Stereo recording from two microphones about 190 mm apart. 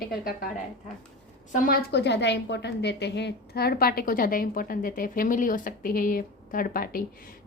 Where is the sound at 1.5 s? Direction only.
50° left (ahead or behind).